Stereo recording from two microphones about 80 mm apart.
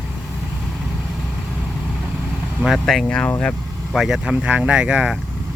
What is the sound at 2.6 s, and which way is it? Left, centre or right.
Speech, centre.